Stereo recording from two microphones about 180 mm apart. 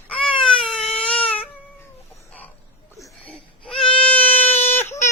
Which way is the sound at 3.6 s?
5° left (ahead or behind).